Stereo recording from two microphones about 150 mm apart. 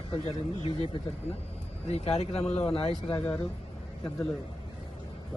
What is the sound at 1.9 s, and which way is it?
Speech, 45° left (ahead or behind).